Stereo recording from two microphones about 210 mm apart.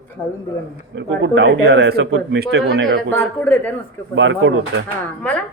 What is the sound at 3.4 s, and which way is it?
Speech, 5° left (ahead or behind).